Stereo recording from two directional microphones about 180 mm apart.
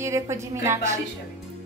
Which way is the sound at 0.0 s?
15° right (ahead or behind).